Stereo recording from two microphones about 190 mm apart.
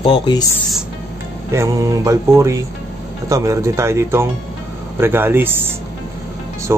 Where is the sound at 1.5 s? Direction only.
15° right (ahead or behind).